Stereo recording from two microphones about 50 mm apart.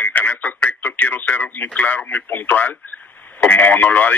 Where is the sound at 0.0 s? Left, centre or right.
Left.